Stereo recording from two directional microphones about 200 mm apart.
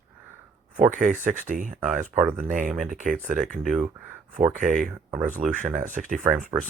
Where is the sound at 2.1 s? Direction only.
10° right (ahead or behind).